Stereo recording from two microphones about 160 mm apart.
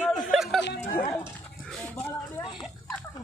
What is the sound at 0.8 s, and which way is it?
Dog, 50° left (ahead or behind).